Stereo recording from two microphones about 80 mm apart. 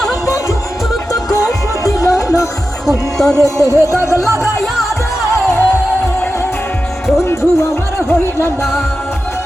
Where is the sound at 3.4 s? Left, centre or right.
Left.